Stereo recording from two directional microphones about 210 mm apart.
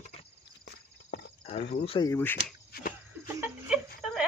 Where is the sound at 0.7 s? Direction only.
55° left (ahead or behind).